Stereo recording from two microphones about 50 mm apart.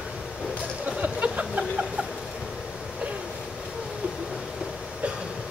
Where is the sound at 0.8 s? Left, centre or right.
Right.